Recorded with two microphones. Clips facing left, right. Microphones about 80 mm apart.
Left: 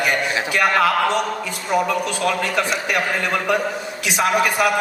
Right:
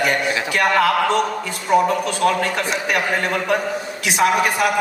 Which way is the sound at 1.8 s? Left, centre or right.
Right.